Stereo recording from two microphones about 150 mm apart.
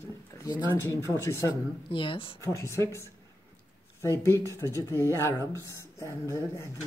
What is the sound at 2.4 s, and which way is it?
Speech, 20° left (ahead or behind).